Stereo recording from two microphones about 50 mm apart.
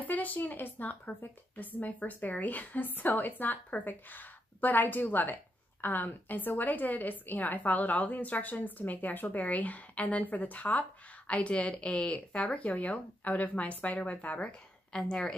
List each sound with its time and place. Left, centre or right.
0.0 s speech: left
14.9 s a woman's voice: centre